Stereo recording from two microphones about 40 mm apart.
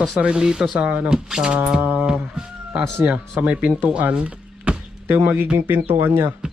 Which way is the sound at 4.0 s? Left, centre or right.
Right.